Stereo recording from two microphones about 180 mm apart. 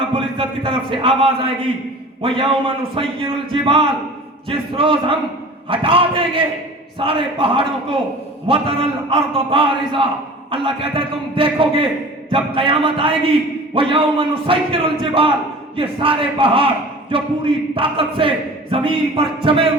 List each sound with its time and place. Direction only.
0.1 s a man's voice: 30° right (ahead or behind)